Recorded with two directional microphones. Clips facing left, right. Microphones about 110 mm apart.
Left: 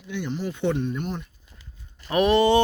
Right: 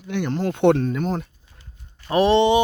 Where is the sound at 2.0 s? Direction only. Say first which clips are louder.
Right 2 dB; 30° right (ahead or behind).